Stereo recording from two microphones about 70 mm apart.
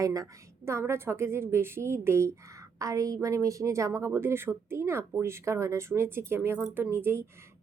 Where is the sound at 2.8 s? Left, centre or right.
Right.